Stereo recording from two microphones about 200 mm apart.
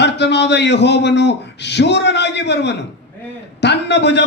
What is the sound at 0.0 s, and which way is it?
A man's voice, 60° left (ahead or behind).